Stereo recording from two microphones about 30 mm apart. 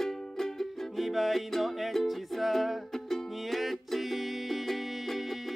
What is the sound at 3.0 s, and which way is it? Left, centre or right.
Music, centre.